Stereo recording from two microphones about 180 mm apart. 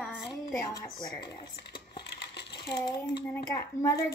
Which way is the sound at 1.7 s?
65° left (ahead or behind).